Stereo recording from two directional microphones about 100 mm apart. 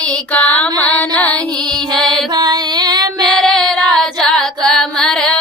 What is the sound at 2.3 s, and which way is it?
Music, 45° right (ahead or behind).